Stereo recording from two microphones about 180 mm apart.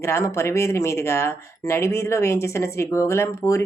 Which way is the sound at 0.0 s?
15° left (ahead or behind).